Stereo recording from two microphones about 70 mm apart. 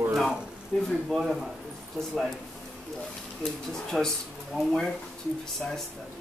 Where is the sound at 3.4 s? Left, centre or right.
Centre.